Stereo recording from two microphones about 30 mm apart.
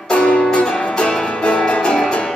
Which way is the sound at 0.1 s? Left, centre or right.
Left.